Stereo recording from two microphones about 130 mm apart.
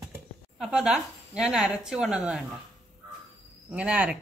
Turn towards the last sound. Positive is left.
turn(degrees=-10)  # may be behind; listen again after turning